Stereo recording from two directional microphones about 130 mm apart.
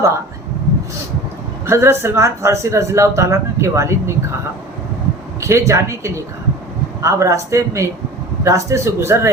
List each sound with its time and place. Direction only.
1.6 s speech: 20° right (ahead or behind)
5.4 s speech: 20° right (ahead or behind)